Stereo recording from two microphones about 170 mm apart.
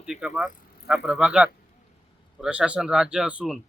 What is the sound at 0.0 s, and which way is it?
Speech, 5° right (ahead or behind).